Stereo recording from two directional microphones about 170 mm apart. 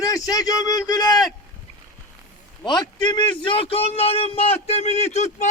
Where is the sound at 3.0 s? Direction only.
30° left (ahead or behind).